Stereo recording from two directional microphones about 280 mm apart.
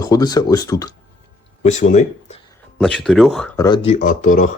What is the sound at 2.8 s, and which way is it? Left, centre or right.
Speech, centre.